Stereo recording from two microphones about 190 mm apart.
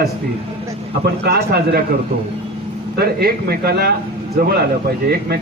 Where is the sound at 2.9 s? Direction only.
55° right (ahead or behind).